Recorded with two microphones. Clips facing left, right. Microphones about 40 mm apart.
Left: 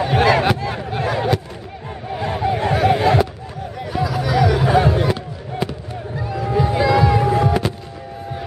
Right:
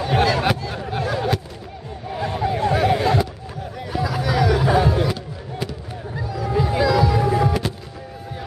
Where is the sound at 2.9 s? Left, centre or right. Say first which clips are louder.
Left 3 dB; centre.